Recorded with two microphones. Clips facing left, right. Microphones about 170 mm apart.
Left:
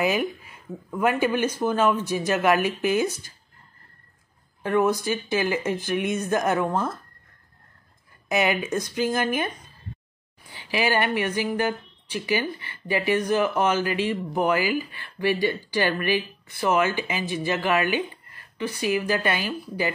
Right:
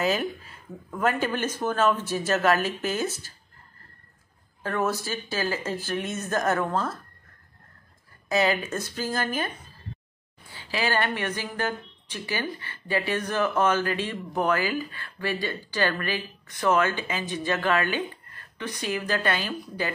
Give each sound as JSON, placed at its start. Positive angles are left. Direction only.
{"t": 0.0, "sound": "a woman's voice", "side_deg": 15}
{"t": 4.6, "sound": "a woman's voice", "side_deg": 15}
{"t": 8.3, "sound": "a woman's voice", "side_deg": 20}
{"t": 10.5, "sound": "a woman's voice", "side_deg": 15}